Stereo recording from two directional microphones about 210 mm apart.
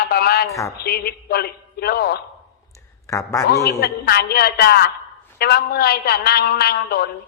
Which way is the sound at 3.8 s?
50° left (ahead or behind).